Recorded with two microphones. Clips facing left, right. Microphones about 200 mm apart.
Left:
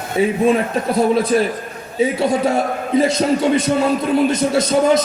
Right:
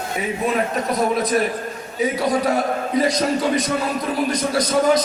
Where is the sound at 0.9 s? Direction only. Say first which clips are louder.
Left 5 dB; 30° left (ahead or behind).